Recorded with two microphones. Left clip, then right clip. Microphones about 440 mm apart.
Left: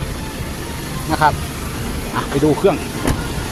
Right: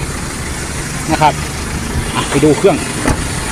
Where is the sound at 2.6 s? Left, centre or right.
Left.